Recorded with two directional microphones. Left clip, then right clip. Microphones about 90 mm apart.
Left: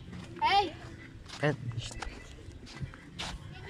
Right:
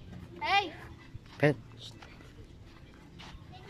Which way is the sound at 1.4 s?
90° right.